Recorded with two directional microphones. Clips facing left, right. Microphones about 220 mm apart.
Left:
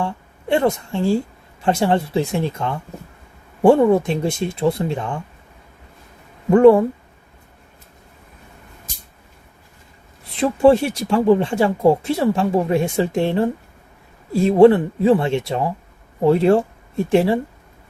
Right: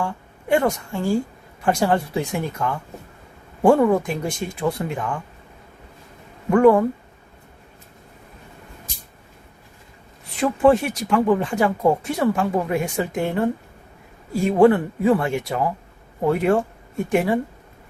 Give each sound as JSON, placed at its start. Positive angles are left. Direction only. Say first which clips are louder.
{"t": 0.0, "sound": "a woman's voice", "louder": "left 2 dB", "side_deg": 25}
{"t": 6.5, "sound": "speech", "louder": "left 4 dB", "side_deg": 25}
{"t": 10.3, "sound": "speech", "louder": "left 3 dB", "side_deg": 30}